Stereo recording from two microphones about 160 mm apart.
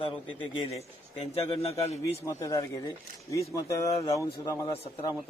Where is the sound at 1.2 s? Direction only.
40° left (ahead or behind).